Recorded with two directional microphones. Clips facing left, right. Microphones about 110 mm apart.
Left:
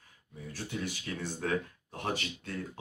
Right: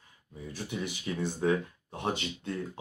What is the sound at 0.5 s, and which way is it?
Speech, 15° right (ahead or behind).